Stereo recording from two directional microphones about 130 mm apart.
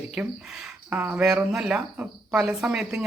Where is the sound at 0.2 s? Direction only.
10° right (ahead or behind).